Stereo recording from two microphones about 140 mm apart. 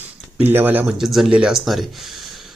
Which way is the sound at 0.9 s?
Centre (ahead or behind).